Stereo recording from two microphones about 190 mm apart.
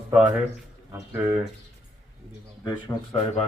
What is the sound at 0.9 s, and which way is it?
Speech, 15° right (ahead or behind).